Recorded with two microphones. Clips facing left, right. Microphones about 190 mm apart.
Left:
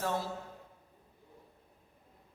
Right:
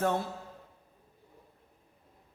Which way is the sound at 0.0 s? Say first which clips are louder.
Right 5 dB; 55° right (ahead or behind).